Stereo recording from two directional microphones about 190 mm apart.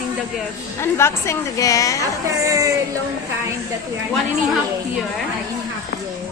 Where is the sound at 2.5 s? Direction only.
15° right (ahead or behind).